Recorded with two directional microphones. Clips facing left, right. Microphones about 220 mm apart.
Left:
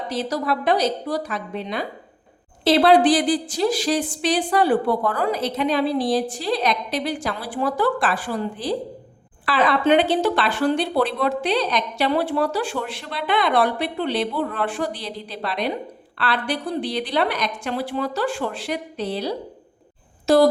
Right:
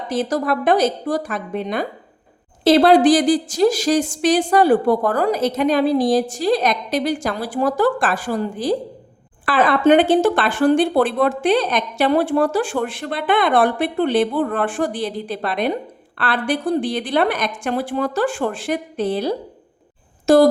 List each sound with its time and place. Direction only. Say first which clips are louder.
0.1 s speech: right 5 dB; 50° right (ahead or behind)